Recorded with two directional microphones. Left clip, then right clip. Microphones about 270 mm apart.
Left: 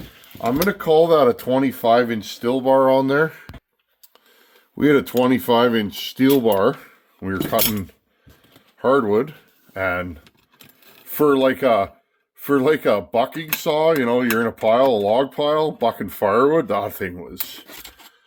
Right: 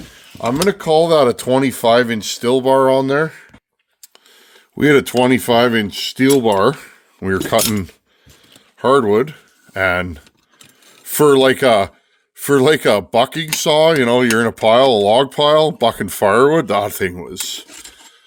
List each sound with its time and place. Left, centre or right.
0.4 s speech: right; by 3.4 s centre
4.7 s speech: right
8.8 s speech: right
9.7 s speech: right